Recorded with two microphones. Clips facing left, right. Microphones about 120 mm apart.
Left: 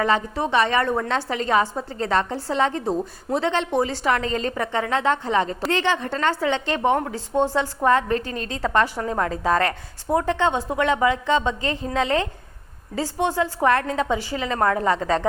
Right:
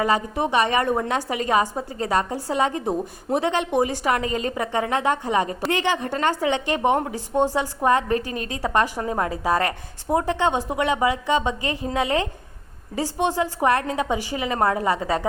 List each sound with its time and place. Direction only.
0.0 s a woman's voice: 15° right (ahead or behind)